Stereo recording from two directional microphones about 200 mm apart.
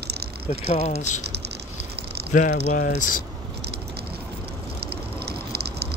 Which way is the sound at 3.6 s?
55° right (ahead or behind).